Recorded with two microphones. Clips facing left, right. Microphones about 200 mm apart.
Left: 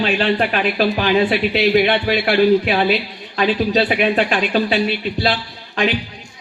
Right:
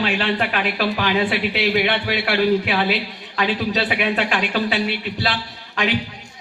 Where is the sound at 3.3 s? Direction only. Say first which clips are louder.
Left 5 dB; 25° left (ahead or behind).